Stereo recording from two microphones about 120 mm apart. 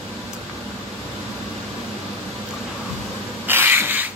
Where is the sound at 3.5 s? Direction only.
20° right (ahead or behind).